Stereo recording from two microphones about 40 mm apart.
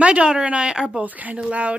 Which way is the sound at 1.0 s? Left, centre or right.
Right.